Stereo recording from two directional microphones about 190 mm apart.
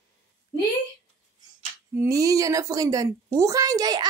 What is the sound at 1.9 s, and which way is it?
A woman's voice, 15° right (ahead or behind).